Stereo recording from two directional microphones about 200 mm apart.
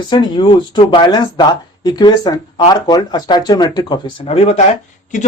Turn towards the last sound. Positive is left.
turn(degrees=35)  # may be behind; listen again after turning